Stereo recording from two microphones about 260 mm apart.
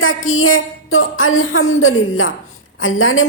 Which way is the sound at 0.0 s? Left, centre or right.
Left.